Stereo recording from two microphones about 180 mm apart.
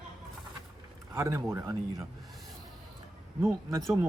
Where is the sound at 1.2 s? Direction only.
15° right (ahead or behind).